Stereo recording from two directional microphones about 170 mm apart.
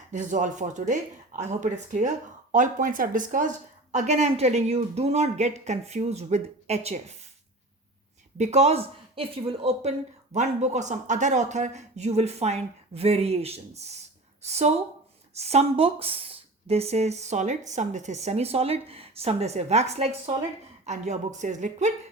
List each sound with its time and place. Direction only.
0.1 s speech: 45° right (ahead or behind)
8.4 s a woman's voice: 40° right (ahead or behind)